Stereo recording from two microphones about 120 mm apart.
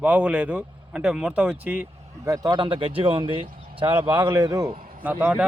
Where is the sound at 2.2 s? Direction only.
30° right (ahead or behind); by 3.9 s 50° right (ahead or behind).